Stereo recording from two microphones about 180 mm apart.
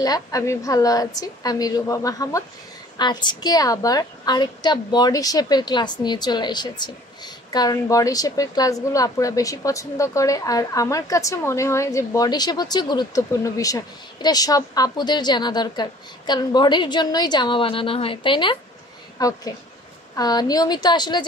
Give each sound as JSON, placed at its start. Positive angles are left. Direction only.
{"t": 0.0, "sound": "a woman's voice", "side_deg": 20}